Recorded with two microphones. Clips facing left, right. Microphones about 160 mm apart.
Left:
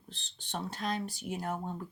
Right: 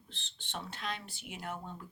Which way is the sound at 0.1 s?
40° left (ahead or behind).